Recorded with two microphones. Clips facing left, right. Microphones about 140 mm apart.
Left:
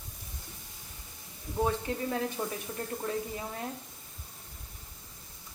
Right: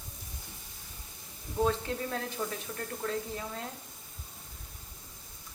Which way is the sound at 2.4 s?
25° left (ahead or behind).